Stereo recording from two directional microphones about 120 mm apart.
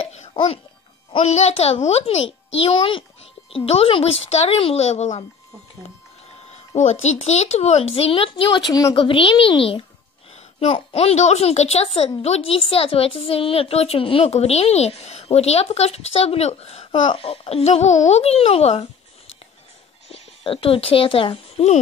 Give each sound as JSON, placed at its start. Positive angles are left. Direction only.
{"t": 1.2, "sound": "a woman's voice", "side_deg": 65}
{"t": 2.6, "sound": "a child's voice", "side_deg": 45}
{"t": 3.5, "sound": "a woman's voice", "side_deg": 55}
{"t": 6.5, "sound": "a woman's voice", "side_deg": 70}
{"t": 20.1, "sound": "speech", "side_deg": 50}